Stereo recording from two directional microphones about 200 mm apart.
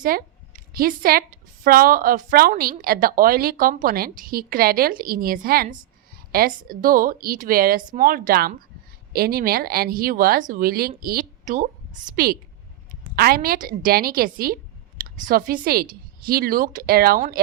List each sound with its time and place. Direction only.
0.0 s a woman's voice: 45° right (ahead or behind)